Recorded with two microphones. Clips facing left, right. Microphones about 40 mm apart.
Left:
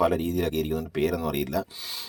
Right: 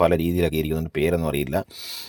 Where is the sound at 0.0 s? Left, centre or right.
Right.